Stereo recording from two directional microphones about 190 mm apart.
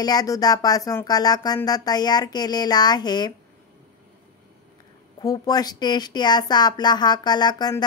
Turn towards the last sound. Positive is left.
turn(degrees=20)  # may be behind; listen again after turning